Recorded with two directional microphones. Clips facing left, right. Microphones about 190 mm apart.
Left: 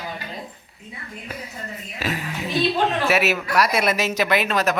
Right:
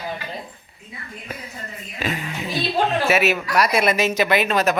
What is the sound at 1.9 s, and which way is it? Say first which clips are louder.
Music: right 1 dB; centre (ahead or behind).